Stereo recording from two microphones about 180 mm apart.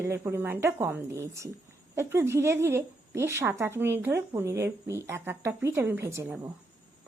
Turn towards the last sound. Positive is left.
turn(degrees=-15)  # may be behind; listen again after turning